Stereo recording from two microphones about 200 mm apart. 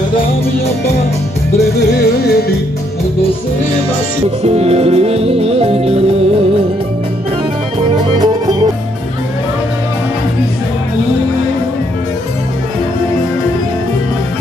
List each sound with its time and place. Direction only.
1.8 s music: 55° left (ahead or behind)
4.4 s music: 30° right (ahead or behind)